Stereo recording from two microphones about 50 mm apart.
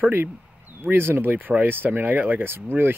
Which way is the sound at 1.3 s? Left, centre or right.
Right.